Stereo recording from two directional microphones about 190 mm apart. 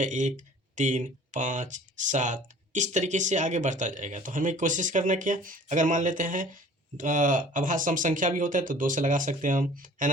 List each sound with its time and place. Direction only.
0.0 s speech: 40° right (ahead or behind)